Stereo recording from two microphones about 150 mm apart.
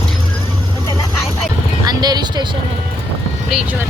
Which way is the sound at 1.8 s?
25° right (ahead or behind).